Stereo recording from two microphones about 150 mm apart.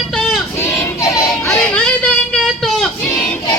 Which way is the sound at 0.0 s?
5° left (ahead or behind).